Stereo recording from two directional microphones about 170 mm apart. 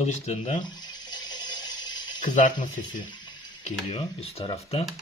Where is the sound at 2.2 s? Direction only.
50° left (ahead or behind).